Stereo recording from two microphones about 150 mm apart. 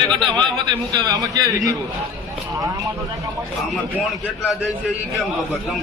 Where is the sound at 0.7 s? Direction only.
25° right (ahead or behind).